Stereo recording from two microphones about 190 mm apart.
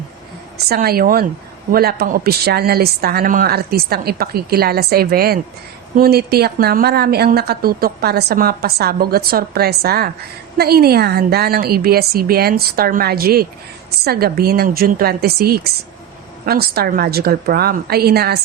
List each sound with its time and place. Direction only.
0.7 s a woman's voice: 55° right (ahead or behind)